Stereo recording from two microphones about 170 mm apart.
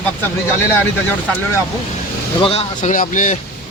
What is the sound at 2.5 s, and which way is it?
Speech, 40° left (ahead or behind).